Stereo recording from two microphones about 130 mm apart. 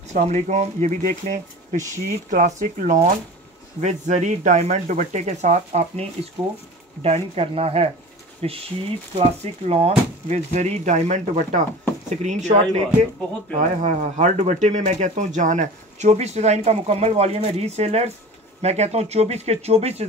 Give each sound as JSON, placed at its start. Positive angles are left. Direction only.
{"t": 0.1, "sound": "speech", "side_deg": -65}
{"t": 1.9, "sound": "speech", "side_deg": -80}
{"t": 3.8, "sound": "speech", "side_deg": -65}